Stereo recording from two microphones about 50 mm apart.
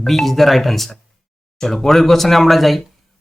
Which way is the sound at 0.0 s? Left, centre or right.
Centre.